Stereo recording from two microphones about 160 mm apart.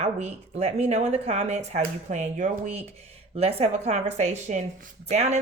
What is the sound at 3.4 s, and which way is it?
A woman's voice, 40° right (ahead or behind).